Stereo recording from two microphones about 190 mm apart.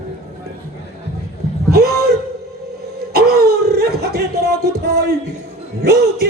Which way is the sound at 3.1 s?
55° right (ahead or behind).